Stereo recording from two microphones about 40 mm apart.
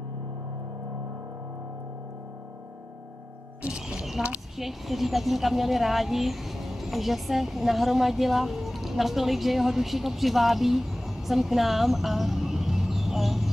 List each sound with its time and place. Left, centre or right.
3.6 s speech: right
4.2 s a woman's voice: centre
4.6 s speech: centre